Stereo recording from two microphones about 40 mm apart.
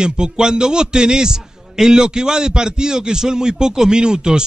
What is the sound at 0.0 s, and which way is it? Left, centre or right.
A man's voice, centre.